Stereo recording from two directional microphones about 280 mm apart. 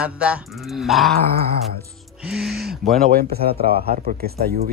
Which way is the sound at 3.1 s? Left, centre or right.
Right.